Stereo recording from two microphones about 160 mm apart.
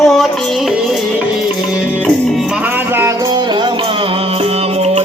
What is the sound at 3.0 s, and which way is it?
Music, 25° right (ahead or behind).